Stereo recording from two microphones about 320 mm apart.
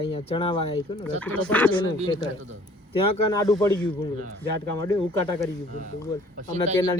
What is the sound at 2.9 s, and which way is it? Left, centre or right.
Speech, centre.